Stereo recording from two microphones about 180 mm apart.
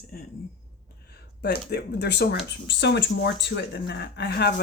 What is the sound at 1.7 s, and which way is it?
Speech, 65° left (ahead or behind).